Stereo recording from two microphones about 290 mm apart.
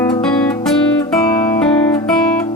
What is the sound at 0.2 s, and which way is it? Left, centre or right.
Music, centre.